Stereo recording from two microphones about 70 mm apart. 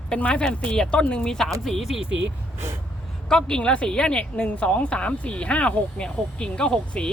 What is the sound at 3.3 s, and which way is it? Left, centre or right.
Speech, centre.